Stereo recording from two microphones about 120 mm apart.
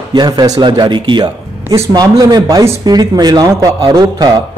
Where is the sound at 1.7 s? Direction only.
30° right (ahead or behind).